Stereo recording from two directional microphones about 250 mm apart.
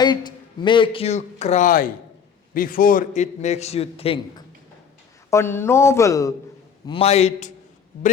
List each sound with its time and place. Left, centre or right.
0.0 s a man's voice: centre
5.3 s a man's voice: centre; by 7.5 s left